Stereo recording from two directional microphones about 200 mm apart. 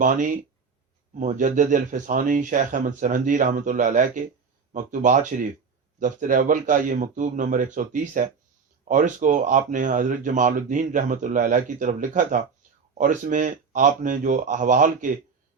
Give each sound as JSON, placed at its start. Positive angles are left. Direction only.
{"t": 0.0, "sound": "speech", "side_deg": -40}